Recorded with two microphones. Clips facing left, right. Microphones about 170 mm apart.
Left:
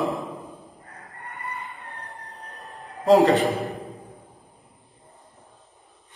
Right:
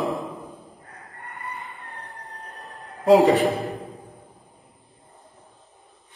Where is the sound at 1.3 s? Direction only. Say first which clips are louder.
Left 1 dB; centre (ahead or behind).